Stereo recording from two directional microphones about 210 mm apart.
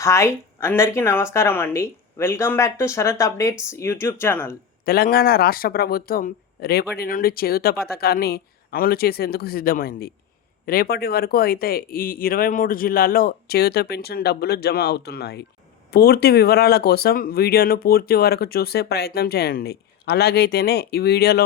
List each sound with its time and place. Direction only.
0.0 s speech: 15° left (ahead or behind)
4.9 s speech: 45° left (ahead or behind)